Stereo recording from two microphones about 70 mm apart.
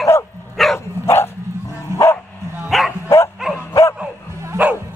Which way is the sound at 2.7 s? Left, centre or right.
Centre.